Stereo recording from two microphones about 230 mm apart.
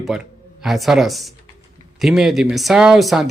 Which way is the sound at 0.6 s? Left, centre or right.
Centre.